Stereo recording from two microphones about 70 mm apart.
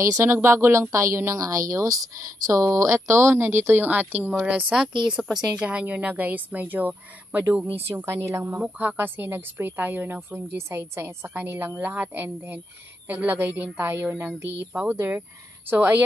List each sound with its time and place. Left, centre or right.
0.2 s a woman's voice: right
7.9 s a woman's voice: right